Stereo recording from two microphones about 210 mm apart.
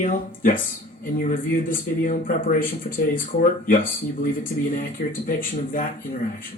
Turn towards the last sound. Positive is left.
turn(degrees=40)  # may be behind; listen again after turning